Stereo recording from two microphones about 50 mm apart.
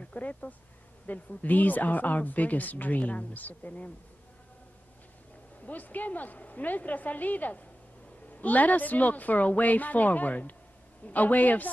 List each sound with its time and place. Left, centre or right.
0.0 s speech: left
5.7 s speech: left